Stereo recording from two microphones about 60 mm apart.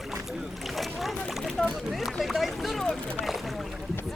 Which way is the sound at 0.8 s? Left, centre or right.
Centre.